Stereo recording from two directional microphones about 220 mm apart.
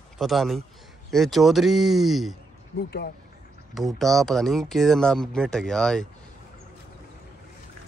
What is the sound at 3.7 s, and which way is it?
Speech, centre (ahead or behind).